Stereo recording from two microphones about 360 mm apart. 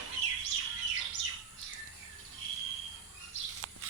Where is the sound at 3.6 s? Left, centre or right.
Right.